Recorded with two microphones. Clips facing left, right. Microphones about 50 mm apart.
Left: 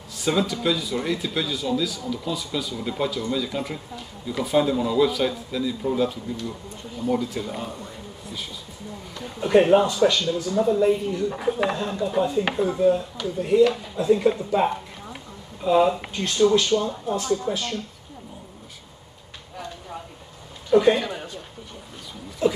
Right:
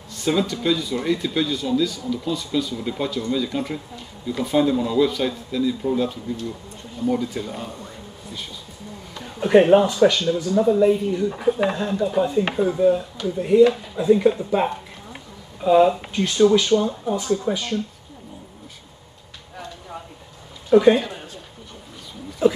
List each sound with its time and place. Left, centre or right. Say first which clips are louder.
0.1 s speech: right 1 dB; centre
9.4 s speech: right 3 dB; centre
10.3 s speech: right 3 dB; centre
15.6 s speech: right 4 dB; centre
16.5 s speech: right 3 dB; centre
20.7 s speech: right 3 dB; centre